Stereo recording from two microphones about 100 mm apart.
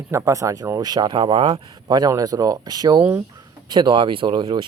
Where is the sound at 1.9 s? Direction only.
40° right (ahead or behind).